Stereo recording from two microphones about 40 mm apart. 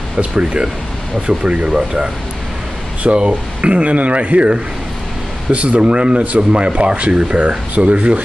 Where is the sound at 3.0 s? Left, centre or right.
Right.